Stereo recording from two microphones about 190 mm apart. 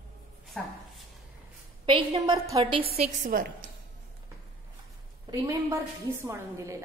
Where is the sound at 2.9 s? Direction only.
40° right (ahead or behind).